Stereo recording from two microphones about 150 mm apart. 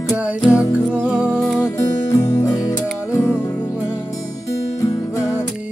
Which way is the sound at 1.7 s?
20° left (ahead or behind).